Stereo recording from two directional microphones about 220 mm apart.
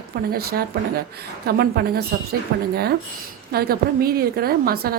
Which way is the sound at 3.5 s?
45° right (ahead or behind).